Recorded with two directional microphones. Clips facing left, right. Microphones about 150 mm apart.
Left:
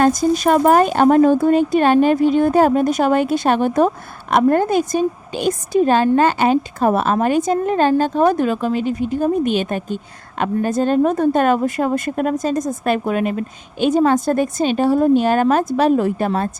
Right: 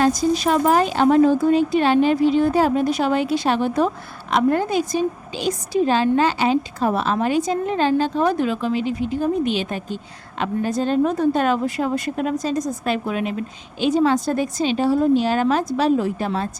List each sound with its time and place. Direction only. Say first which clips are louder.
0.0 s speech: left 3 dB; 50° left (ahead or behind)